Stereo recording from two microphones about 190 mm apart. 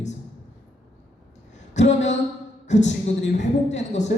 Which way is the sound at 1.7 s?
35° left (ahead or behind).